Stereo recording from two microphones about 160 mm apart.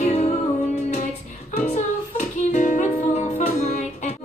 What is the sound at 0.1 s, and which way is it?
Music, 45° left (ahead or behind).